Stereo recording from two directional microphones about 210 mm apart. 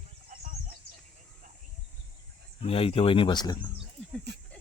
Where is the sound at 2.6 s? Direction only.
25° left (ahead or behind).